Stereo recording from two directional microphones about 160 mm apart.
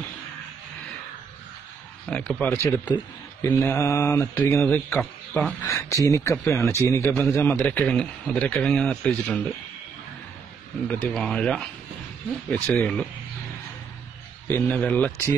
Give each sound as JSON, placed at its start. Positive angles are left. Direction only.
{"t": 2.0, "sound": "speech", "side_deg": 5}
{"t": 10.9, "sound": "speech", "side_deg": 5}
{"t": 14.5, "sound": "speech", "side_deg": 5}